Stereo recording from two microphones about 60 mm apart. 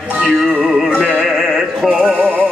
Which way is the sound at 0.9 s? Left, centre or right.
Left.